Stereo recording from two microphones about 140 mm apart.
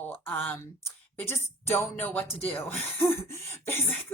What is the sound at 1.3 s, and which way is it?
Speech, 15° left (ahead or behind).